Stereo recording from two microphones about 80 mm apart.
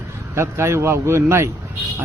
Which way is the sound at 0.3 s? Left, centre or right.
Right.